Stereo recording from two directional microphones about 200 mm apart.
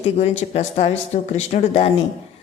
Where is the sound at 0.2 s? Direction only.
35° left (ahead or behind).